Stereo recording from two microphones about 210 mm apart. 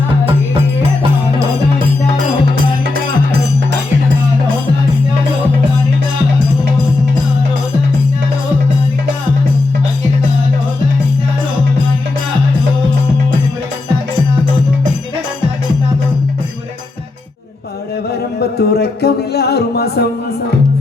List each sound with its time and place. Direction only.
0.3 s music: 25° right (ahead or behind)
18.3 s music: 50° left (ahead or behind)